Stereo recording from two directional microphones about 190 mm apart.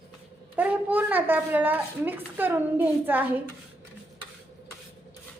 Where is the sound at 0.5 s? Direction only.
10° right (ahead or behind).